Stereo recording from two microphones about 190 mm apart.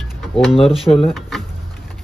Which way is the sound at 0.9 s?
30° left (ahead or behind).